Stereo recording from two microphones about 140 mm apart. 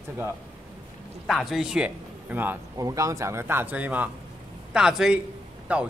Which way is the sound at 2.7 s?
25° right (ahead or behind).